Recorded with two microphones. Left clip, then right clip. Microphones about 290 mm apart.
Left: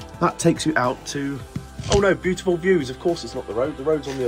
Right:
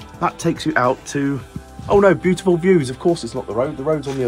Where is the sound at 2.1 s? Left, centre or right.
Centre.